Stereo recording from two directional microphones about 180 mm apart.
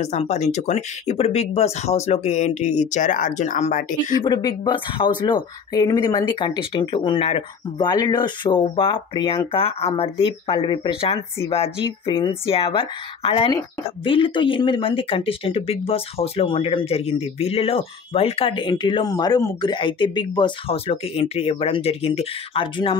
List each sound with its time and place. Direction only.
0.0 s speech: 40° left (ahead or behind)
4.2 s speech: 25° left (ahead or behind)